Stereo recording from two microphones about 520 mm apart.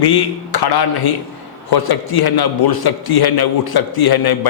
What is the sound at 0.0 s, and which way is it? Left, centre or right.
A man's voice, left.